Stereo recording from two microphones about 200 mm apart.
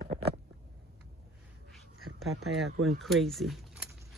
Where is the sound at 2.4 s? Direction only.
Centre (ahead or behind).